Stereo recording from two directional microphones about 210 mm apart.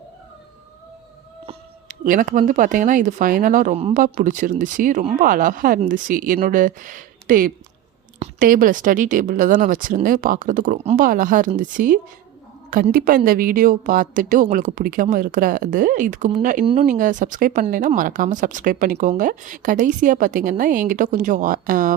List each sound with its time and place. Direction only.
1.5 s speech: 40° right (ahead or behind)